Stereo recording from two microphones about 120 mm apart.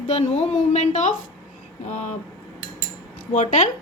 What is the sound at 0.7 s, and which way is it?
Speech, 75° left (ahead or behind).